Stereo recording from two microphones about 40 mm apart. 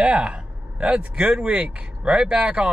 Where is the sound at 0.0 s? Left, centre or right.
Right.